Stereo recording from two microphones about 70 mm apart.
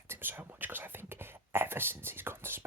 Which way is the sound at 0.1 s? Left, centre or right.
Right.